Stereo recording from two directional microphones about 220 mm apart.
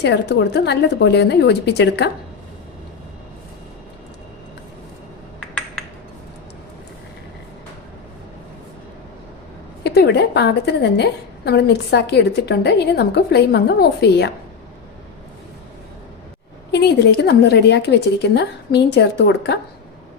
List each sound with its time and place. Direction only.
0.0 s a woman's voice: 50° left (ahead or behind)
5.4 s a sound: 5° left (ahead or behind)
9.8 s a woman's voice: 50° left (ahead or behind)
16.7 s a woman's voice: 50° left (ahead or behind)